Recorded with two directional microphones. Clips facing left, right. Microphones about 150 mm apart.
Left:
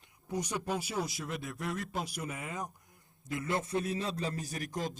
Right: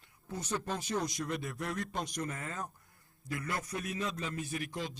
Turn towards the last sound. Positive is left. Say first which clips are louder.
# left 1 dB
turn(degrees=45)  # may be behind; listen again after turning